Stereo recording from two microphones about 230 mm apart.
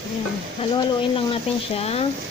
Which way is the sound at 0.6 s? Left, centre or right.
Left.